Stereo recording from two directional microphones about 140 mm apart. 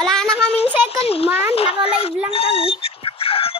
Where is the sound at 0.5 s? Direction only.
45° left (ahead or behind).